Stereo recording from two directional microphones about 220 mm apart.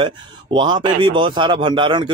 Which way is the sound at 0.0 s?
20° right (ahead or behind).